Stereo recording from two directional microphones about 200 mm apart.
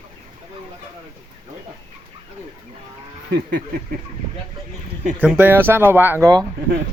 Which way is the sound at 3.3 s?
55° right (ahead or behind).